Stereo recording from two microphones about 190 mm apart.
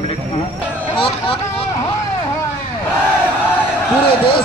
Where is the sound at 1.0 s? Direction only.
30° left (ahead or behind).